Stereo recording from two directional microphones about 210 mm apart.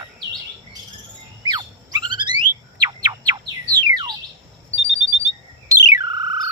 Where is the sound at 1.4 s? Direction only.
20° right (ahead or behind).